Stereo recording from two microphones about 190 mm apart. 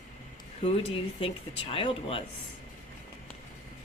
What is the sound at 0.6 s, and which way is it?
A woman's voice, 30° left (ahead or behind).